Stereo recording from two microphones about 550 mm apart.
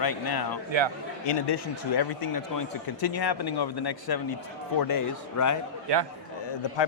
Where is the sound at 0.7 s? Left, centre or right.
Right.